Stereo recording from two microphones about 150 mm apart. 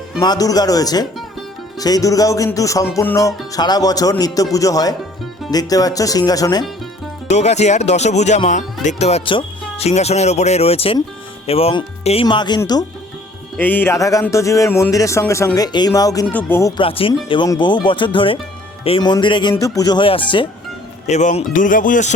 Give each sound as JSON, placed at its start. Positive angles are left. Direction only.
{"t": 0.2, "sound": "speech", "side_deg": 25}
{"t": 7.3, "sound": "speech", "side_deg": 50}
{"t": 13.6, "sound": "speech", "side_deg": 10}
{"t": 16.2, "sound": "speech", "side_deg": 10}
{"t": 16.7, "sound": "speech", "side_deg": 35}
{"t": 21.1, "sound": "speech", "side_deg": 50}